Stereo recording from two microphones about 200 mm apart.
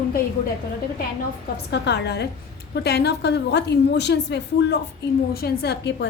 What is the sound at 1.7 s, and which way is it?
A woman's voice, 60° left (ahead or behind).